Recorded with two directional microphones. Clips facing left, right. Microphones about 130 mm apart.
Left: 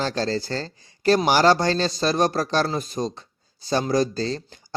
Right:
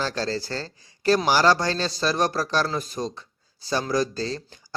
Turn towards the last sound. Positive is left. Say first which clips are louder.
# left 3 dB
turn(degrees=25)  # may be behind; listen again after turning